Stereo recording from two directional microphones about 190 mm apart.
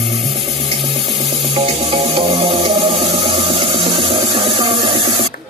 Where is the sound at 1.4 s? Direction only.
30° right (ahead or behind).